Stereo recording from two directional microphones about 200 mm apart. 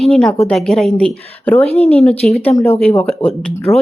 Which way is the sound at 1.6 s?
30° left (ahead or behind).